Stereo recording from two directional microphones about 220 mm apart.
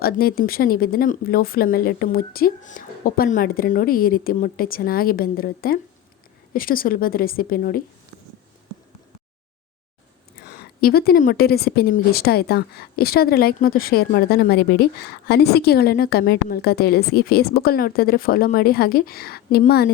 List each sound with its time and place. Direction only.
0.0 s speech: 45° left (ahead or behind)
10.5 s a woman's voice: 45° left (ahead or behind)